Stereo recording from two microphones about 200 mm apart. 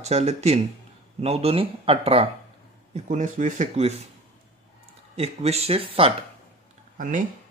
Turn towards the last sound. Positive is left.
turn(degrees=-40)  # may be behind; listen again after turning